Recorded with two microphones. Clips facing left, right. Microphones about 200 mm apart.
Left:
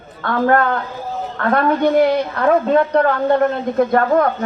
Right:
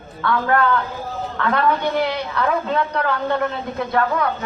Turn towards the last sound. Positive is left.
turn(degrees=45)  # may be behind; listen again after turning